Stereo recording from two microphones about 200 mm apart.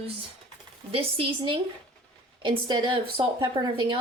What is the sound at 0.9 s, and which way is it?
Speech, 25° right (ahead or behind).